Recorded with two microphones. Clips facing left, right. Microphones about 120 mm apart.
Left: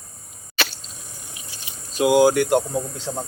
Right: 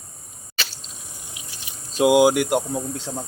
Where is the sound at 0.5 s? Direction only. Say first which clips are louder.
Left 7 dB; 60° left (ahead or behind).